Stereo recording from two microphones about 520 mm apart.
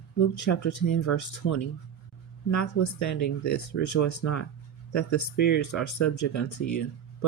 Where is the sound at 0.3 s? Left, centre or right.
Left.